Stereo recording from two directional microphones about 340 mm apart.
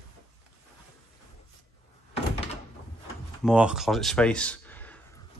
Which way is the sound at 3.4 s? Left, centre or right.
Centre.